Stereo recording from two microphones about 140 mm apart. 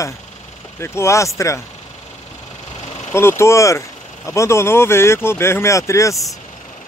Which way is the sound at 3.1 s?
20° left (ahead or behind).